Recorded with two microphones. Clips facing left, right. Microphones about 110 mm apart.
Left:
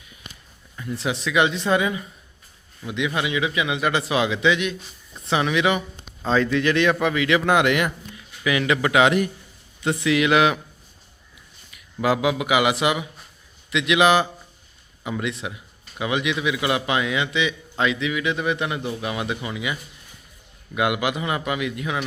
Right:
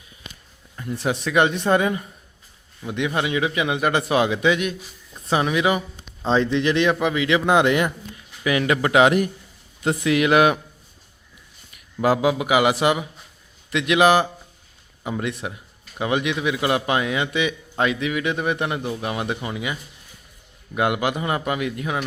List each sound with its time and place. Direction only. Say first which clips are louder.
0.9 s a man's voice: right 2 dB; 50° right (ahead or behind)
3.2 s a man's voice: right 2 dB; 40° right (ahead or behind)
8.4 s a man's voice: right 1 dB; 40° right (ahead or behind)
12.0 s a man's voice: right 2 dB; 35° right (ahead or behind)